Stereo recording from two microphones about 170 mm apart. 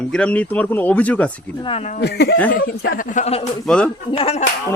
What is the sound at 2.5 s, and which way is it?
A man's voice, 55° left (ahead or behind).